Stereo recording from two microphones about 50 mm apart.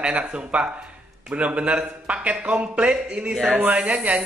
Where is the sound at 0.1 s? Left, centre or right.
Right.